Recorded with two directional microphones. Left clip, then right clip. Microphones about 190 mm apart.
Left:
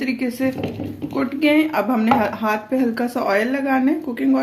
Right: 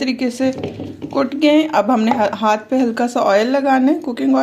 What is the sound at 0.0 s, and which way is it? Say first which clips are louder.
Speech: right 4 dB; 40° right (ahead or behind).